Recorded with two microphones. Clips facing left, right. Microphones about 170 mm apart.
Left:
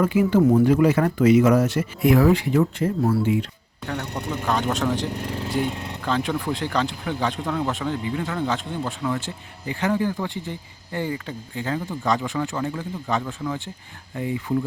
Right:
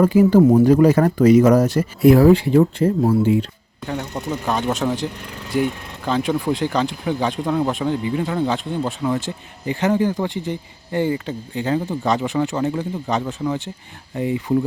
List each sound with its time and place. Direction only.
0.0 s speech: 35° right (ahead or behind)
4.3 s speech: 10° right (ahead or behind)
5.2 s speech: 35° left (ahead or behind)
6.1 s speech: 15° right (ahead or behind)
10.3 s speech: 90° right
10.9 s speech: 25° right (ahead or behind)